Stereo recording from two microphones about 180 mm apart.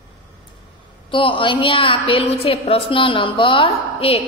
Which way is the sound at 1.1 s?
30° left (ahead or behind).